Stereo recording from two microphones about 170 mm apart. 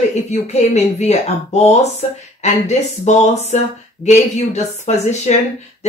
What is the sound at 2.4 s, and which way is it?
Speech, 40° left (ahead or behind).